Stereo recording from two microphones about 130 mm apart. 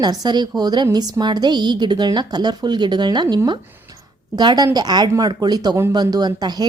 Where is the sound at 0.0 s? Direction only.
30° right (ahead or behind).